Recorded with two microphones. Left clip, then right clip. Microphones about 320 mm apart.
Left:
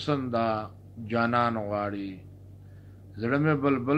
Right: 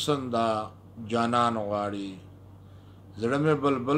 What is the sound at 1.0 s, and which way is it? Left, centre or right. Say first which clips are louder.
Speech: right 1 dB; centre.